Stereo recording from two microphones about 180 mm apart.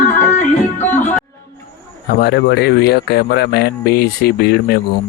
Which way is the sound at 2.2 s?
65° left (ahead or behind).